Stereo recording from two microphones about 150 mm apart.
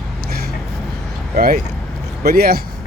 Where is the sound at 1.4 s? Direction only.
80° right.